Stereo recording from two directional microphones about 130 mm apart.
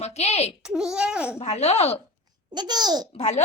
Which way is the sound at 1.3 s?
55° left (ahead or behind).